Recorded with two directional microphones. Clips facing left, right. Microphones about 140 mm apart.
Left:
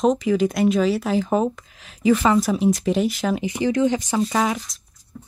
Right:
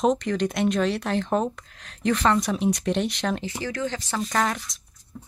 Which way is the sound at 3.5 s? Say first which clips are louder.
Left 9 dB; 20° left (ahead or behind).